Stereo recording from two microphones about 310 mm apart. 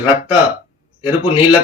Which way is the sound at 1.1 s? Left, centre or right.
Centre.